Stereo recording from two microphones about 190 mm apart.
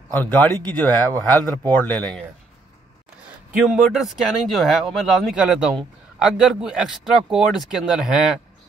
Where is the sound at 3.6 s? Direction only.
Centre (ahead or behind).